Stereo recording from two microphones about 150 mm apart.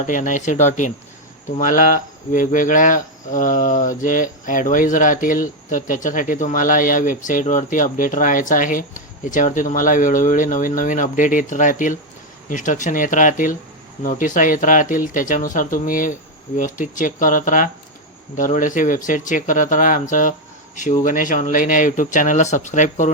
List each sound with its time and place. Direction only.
0.0 s speech: 60° left (ahead or behind)